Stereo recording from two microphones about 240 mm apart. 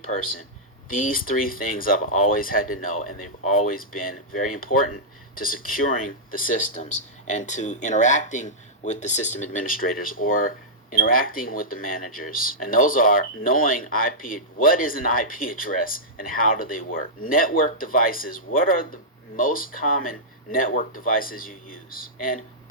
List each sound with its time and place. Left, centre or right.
0.9 s speech: left